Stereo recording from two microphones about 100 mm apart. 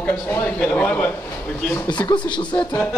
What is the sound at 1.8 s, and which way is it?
Speech, 50° left (ahead or behind).